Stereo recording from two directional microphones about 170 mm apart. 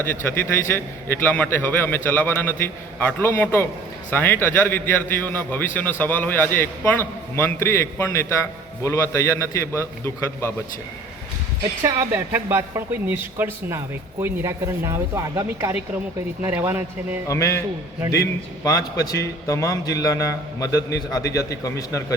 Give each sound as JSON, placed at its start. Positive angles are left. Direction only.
{"t": 0.0, "sound": "a man's voice", "side_deg": 10}
{"t": 11.8, "sound": "speech", "side_deg": -20}
{"t": 17.2, "sound": "a man's voice", "side_deg": 15}